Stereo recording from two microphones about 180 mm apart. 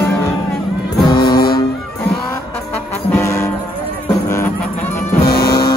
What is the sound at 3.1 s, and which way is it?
Music, 15° left (ahead or behind).